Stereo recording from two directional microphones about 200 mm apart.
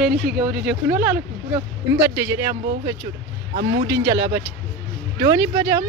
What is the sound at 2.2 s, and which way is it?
Speech, 15° right (ahead or behind).